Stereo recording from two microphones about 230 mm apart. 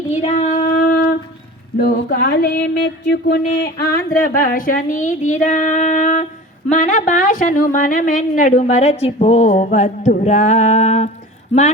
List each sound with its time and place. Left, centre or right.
0.1 s female singing: left
1.8 s a sound: left
4.1 s a woman's voice: left